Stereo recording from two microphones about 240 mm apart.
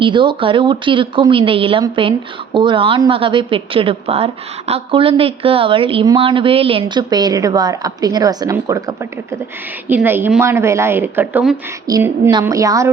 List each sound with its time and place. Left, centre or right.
0.0 s a woman's voice: centre